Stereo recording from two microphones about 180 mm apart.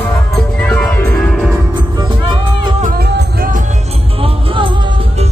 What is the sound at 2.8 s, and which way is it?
Music, 55° right (ahead or behind).